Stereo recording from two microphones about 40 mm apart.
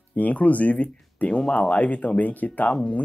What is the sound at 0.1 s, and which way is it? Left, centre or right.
Speech, left.